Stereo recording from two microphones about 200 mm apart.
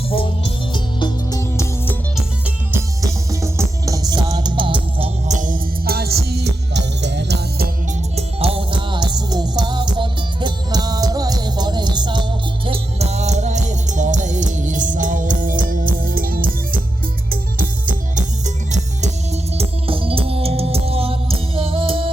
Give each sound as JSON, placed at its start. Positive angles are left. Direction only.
{"t": 0.1, "sound": "music", "side_deg": 25}
{"t": 3.0, "sound": "music", "side_deg": -15}
{"t": 8.1, "sound": "music", "side_deg": -30}